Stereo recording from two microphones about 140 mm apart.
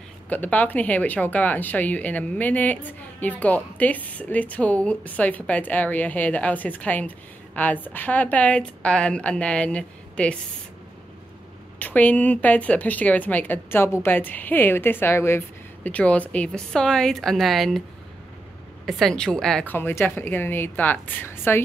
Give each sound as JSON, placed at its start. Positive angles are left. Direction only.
{"t": 0.3, "sound": "speech", "side_deg": 10}
{"t": 11.8, "sound": "speech", "side_deg": 10}
{"t": 18.9, "sound": "a woman's voice", "side_deg": 0}
{"t": 19.7, "sound": "speech", "side_deg": 15}